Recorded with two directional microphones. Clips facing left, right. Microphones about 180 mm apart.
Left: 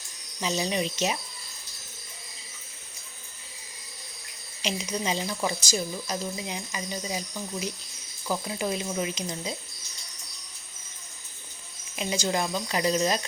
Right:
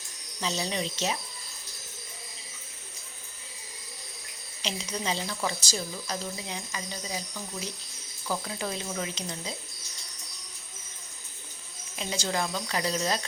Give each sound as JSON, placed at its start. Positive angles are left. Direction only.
{"t": 0.3, "sound": "speech", "side_deg": 15}
{"t": 4.6, "sound": "speech", "side_deg": 15}
{"t": 11.9, "sound": "speech", "side_deg": 15}